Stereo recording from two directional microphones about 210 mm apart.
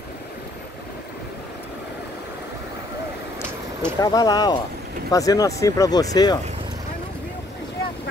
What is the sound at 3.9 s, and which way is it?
Speech, 20° left (ahead or behind).